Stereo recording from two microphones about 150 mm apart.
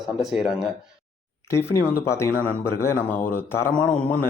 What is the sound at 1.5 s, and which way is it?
Speech, 20° left (ahead or behind).